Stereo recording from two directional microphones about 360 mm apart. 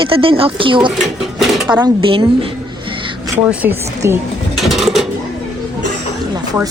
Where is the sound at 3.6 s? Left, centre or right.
Centre.